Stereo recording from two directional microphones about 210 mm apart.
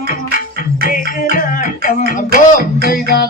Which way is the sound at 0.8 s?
40° left (ahead or behind).